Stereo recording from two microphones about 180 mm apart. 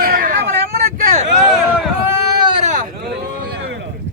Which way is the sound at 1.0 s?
45° right (ahead or behind).